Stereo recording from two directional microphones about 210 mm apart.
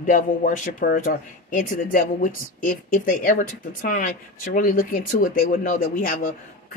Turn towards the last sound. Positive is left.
turn(degrees=40)  # may be behind; listen again after turning